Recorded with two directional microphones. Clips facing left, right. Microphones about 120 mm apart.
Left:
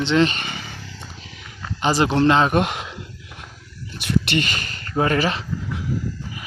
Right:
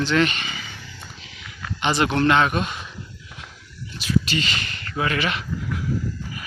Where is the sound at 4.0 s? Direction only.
60° left (ahead or behind); by 5.4 s 35° left (ahead or behind).